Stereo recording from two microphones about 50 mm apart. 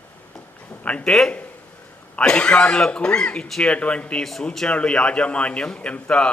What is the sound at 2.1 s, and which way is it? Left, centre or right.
A man's voice, left.